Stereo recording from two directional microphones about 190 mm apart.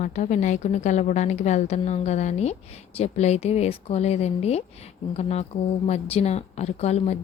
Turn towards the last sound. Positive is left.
turn(degrees=35)  # may be behind; listen again after turning